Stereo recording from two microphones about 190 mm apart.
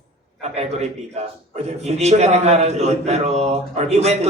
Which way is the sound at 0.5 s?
35° right (ahead or behind).